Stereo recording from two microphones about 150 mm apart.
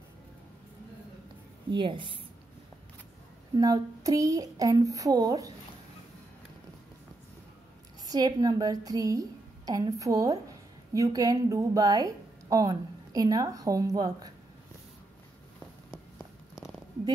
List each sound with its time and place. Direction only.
1.7 s a woman's voice: 35° right (ahead or behind)
3.5 s a woman's voice: 25° right (ahead or behind)
8.1 s a woman's voice: 25° right (ahead or behind)